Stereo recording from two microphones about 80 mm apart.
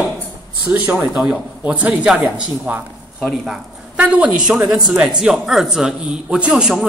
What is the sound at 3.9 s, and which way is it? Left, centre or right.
A man's voice, centre.